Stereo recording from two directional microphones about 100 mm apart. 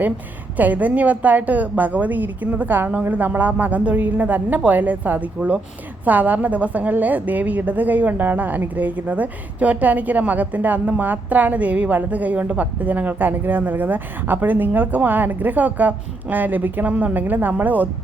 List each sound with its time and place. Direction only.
0.5 s a woman's voice: 15° right (ahead or behind)